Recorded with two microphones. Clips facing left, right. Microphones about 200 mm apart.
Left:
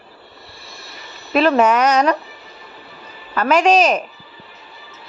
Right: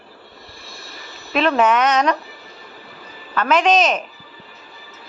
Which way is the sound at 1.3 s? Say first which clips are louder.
Left 3 dB; 5° left (ahead or behind).